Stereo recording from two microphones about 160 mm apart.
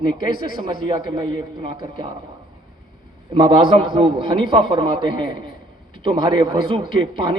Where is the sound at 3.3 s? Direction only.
30° right (ahead or behind).